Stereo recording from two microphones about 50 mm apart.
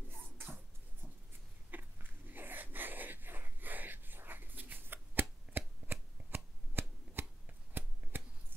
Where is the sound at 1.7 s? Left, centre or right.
Right.